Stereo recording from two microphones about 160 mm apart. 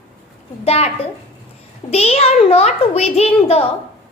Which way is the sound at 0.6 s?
40° left (ahead or behind).